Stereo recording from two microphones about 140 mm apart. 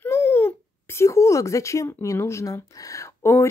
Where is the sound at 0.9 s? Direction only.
20° left (ahead or behind).